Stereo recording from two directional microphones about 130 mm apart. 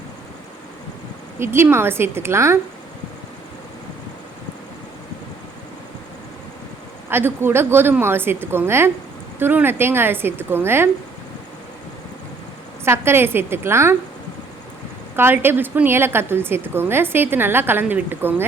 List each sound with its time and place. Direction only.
1.4 s a woman's voice: 20° right (ahead or behind)
7.1 s a woman's voice: 15° right (ahead or behind)
12.8 s a woman's voice: 20° right (ahead or behind)
15.1 s a woman's voice: 15° right (ahead or behind)